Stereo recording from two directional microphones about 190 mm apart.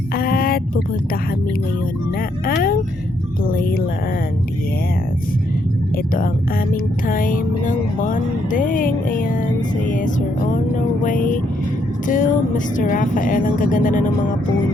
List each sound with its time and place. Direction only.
0.2 s a sound: 50° left (ahead or behind)
3.4 s music: 50° left (ahead or behind)
7.1 s vehicle: 45° left (ahead or behind)
9.8 s music: 45° left (ahead or behind)
11.0 s vehicle: 45° left (ahead or behind)
12.0 s speech: 45° left (ahead or behind)